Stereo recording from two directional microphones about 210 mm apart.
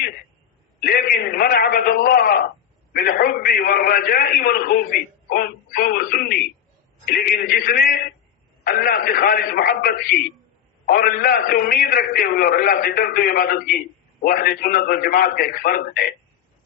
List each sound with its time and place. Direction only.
0.8 s a man's voice: 45° left (ahead or behind)